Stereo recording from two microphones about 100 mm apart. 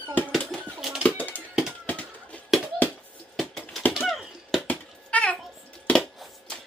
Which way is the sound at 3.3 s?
5° left (ahead or behind).